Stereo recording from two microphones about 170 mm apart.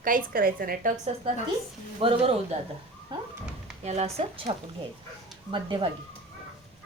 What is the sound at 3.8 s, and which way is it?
Speech, 40° right (ahead or behind).